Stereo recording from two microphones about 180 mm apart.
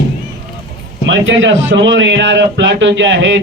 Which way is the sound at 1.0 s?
90° right.